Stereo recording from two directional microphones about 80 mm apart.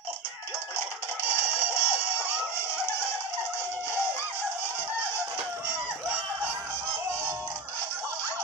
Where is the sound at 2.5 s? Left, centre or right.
Left.